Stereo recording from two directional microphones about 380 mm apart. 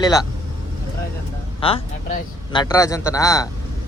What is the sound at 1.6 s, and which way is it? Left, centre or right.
Speech, centre.